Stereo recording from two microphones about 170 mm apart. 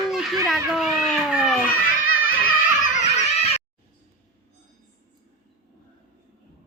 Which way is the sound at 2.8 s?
45° left (ahead or behind).